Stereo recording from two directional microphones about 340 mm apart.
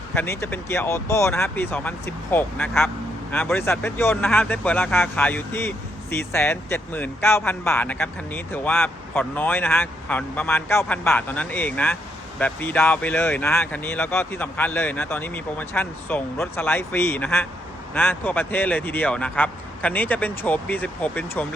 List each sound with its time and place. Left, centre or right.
0.1 s speech: centre